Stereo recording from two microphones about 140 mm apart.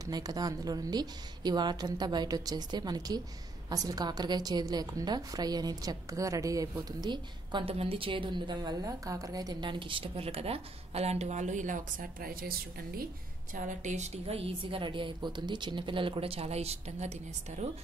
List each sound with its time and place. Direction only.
0.0 s a woman's voice: 25° right (ahead or behind); by 13.0 s 90° right
13.6 s a woman's voice: 55° right (ahead or behind)